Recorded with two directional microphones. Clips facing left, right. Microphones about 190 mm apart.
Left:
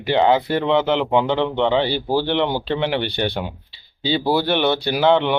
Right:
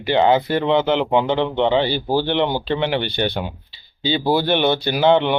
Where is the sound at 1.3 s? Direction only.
15° right (ahead or behind).